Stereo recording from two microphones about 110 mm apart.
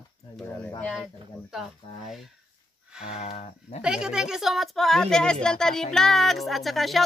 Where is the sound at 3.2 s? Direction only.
80° left.